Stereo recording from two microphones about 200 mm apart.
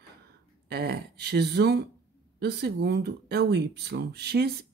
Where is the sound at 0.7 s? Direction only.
55° right (ahead or behind).